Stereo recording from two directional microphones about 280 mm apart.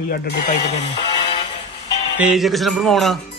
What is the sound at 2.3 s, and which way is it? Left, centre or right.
Speech, centre.